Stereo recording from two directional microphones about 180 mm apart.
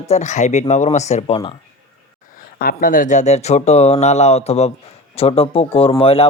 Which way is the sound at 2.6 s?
55° left (ahead or behind).